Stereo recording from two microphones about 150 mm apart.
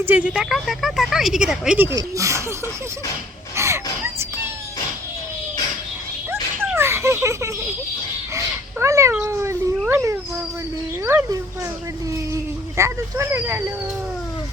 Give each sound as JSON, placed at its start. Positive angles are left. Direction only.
{"t": 0.0, "sound": "speech", "side_deg": -10}
{"t": 1.9, "sound": "speech", "side_deg": -20}
{"t": 3.5, "sound": "a sound", "side_deg": -20}
{"t": 6.7, "sound": "a sound", "side_deg": -15}
{"t": 8.4, "sound": "cat", "side_deg": -20}
{"t": 9.2, "sound": "speech", "side_deg": -20}